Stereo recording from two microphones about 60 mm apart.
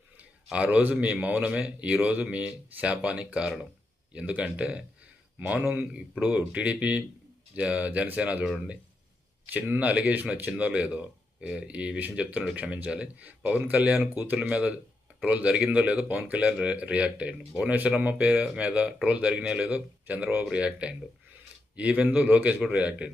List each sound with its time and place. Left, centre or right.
0.5 s speech: right
9.5 s speech: right